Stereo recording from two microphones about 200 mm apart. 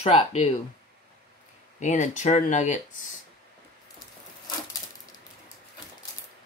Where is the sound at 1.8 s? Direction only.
40° left (ahead or behind).